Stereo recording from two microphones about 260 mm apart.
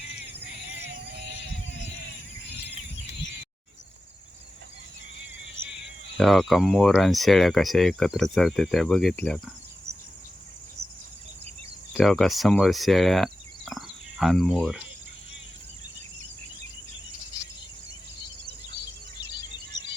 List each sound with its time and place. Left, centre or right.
0.9 s music: right
6.1 s speech: centre
11.9 s speech: centre